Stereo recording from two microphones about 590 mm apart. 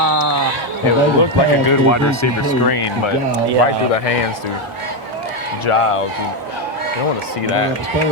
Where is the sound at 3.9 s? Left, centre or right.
Left.